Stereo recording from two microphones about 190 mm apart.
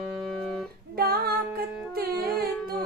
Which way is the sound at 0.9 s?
55° right (ahead or behind).